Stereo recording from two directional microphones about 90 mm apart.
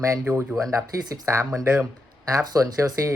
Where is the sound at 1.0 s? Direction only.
40° right (ahead or behind).